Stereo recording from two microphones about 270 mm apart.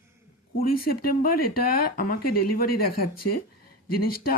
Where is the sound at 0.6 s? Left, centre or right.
Left.